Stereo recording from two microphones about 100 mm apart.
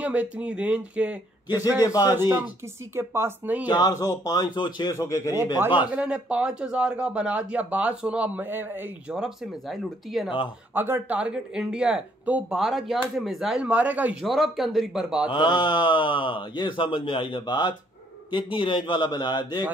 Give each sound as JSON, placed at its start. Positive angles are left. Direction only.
{"t": 0.0, "sound": "speech", "side_deg": -15}
{"t": 1.9, "sound": "speech", "side_deg": 35}
{"t": 2.1, "sound": "speech", "side_deg": -25}
{"t": 3.6, "sound": "speech", "side_deg": 40}
{"t": 4.9, "sound": "speech", "side_deg": 35}
{"t": 5.9, "sound": "speech", "side_deg": -15}
{"t": 9.1, "sound": "speech", "side_deg": -5}
{"t": 10.7, "sound": "speech", "side_deg": -20}
{"t": 14.2, "sound": "speech", "side_deg": 0}
{"t": 15.3, "sound": "speech", "side_deg": 45}